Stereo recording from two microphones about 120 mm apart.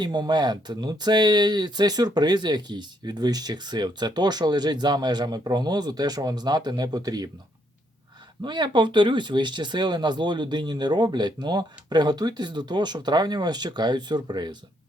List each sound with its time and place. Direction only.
0.0 s speech: 35° right (ahead or behind)
8.4 s speech: 40° right (ahead or behind)